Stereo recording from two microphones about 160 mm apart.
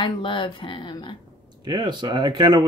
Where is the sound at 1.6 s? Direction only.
25° right (ahead or behind).